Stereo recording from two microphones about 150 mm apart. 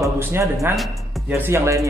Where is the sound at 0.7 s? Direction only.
Centre (ahead or behind).